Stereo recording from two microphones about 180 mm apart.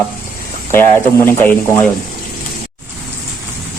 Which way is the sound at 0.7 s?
10° left (ahead or behind).